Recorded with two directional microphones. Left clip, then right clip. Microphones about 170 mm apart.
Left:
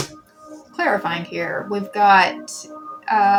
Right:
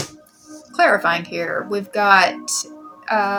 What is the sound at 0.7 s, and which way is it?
Speech, 10° left (ahead or behind).